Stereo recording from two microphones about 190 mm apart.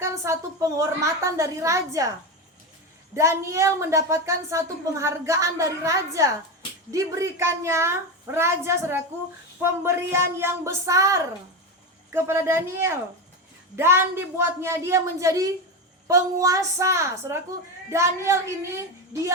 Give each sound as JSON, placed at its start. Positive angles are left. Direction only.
{"t": 0.0, "sound": "a woman's voice", "side_deg": -15}
{"t": 3.2, "sound": "a woman's voice", "side_deg": -15}